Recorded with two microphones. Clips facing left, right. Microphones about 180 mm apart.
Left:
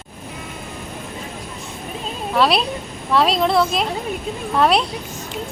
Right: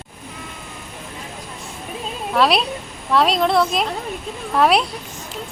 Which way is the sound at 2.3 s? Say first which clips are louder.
Even; centre (ahead or behind).